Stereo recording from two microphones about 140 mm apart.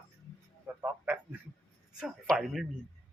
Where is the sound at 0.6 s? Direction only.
15° right (ahead or behind).